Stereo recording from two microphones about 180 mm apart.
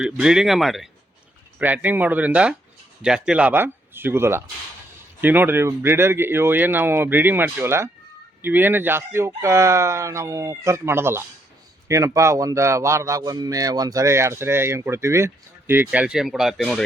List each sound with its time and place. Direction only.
0.0 s speech: 5° right (ahead or behind)